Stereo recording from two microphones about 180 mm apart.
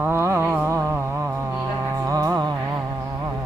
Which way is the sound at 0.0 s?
15° right (ahead or behind).